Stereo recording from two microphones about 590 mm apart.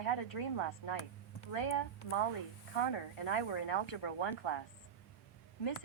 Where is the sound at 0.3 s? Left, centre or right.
Left.